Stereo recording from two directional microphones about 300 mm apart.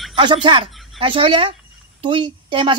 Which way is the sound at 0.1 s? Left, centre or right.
Centre.